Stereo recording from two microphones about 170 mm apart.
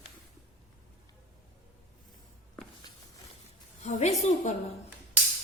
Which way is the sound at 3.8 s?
45° left (ahead or behind).